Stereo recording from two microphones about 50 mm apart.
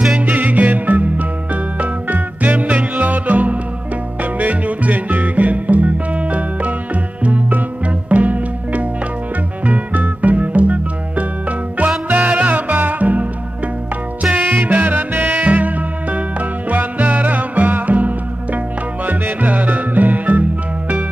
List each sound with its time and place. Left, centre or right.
0.2 s music: right
14.3 s music: right
14.6 s music: right